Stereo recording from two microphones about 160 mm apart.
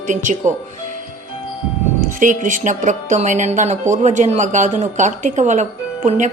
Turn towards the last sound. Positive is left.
turn(degrees=-50)  # may be behind; listen again after turning